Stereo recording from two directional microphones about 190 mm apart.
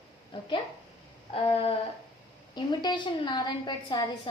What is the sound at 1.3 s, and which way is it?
Speech, 30° left (ahead or behind).